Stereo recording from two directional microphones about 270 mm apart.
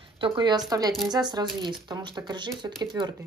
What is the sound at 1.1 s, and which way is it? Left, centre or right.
Speech, centre.